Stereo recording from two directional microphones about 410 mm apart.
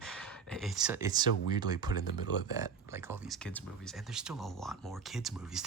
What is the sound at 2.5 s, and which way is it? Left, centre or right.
Speech, centre.